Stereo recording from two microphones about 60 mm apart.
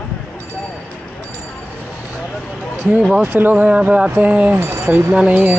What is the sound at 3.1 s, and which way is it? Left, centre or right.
Speech, right.